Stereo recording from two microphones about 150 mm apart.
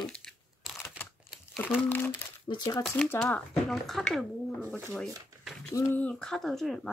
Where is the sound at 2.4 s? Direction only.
30° left (ahead or behind).